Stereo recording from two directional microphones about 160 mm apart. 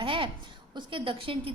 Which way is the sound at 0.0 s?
35° right (ahead or behind).